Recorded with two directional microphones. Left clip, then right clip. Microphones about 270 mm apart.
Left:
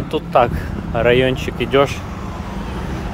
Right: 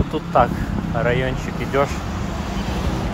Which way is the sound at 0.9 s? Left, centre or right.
Left.